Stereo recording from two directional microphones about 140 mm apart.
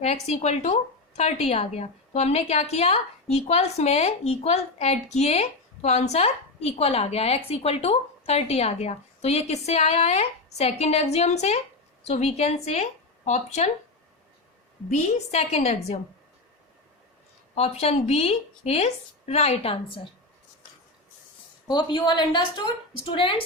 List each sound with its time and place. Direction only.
0.0 s speech: 50° left (ahead or behind)
14.8 s speech: 55° left (ahead or behind)
17.5 s speech: 45° left (ahead or behind)
21.7 s a woman's voice: 35° left (ahead or behind)